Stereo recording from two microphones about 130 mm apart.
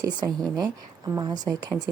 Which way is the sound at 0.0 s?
35° right (ahead or behind).